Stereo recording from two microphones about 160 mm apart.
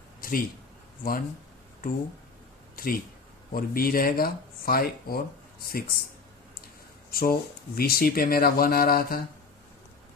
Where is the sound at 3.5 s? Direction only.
65° left (ahead or behind).